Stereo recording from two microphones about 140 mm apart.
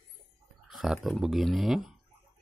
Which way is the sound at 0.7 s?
5° right (ahead or behind).